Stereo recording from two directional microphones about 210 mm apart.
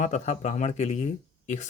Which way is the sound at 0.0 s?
35° left (ahead or behind).